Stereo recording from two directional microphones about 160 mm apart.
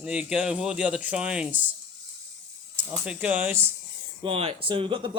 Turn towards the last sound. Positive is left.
turn(degrees=-30)  # may be behind; listen again after turning